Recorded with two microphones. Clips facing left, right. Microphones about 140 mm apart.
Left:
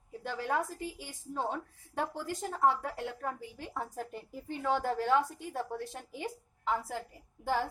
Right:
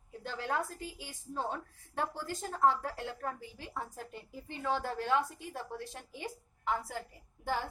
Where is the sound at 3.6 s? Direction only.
50° left (ahead or behind).